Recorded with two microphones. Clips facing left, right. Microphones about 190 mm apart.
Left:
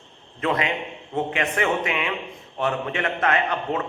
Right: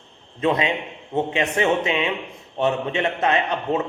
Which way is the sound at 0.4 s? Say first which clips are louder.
Right 3 dB; 20° right (ahead or behind).